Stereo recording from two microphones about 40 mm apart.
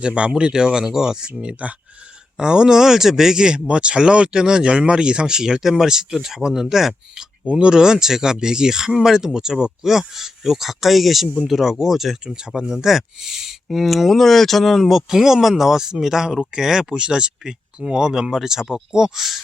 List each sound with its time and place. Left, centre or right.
0.0 s speech: right
1.3 s speech: right
2.4 s speech: centre